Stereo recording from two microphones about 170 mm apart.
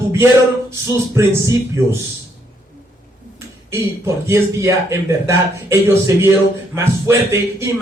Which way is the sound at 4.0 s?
15° right (ahead or behind).